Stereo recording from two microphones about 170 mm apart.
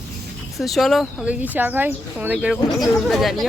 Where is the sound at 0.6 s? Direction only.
Centre (ahead or behind).